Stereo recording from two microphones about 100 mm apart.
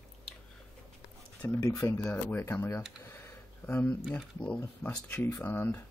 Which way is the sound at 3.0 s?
25° left (ahead or behind).